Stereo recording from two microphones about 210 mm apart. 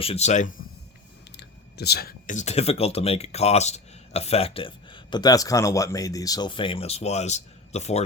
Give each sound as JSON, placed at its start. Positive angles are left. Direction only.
{"t": 0.0, "sound": "speech", "side_deg": 30}
{"t": 1.4, "sound": "speech", "side_deg": 50}